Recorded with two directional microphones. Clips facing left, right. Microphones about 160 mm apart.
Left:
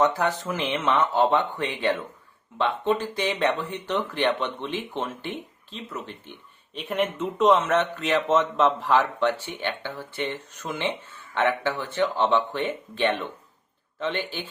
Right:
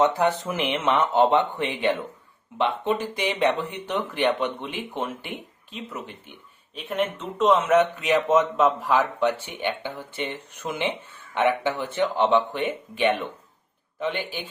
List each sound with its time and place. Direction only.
0.0 s speech: 20° right (ahead or behind)
6.7 s speech: centre (ahead or behind)
7.8 s speech: 10° right (ahead or behind)